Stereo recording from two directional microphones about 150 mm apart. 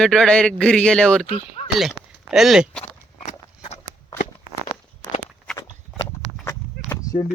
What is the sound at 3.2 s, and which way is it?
Horse, 50° left (ahead or behind).